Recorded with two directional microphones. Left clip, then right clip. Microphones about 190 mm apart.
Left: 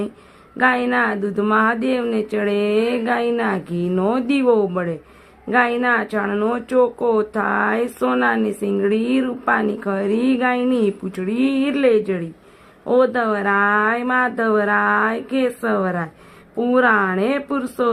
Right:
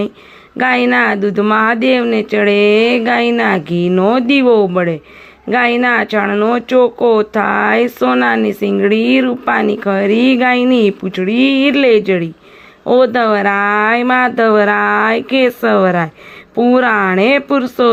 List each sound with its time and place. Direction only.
0.5 s speech: 25° right (ahead or behind)